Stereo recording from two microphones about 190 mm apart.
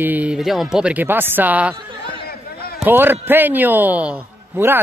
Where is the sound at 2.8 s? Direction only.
10° right (ahead or behind).